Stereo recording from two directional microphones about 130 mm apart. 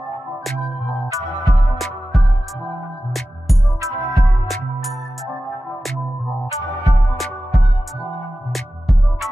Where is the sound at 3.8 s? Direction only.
25° right (ahead or behind).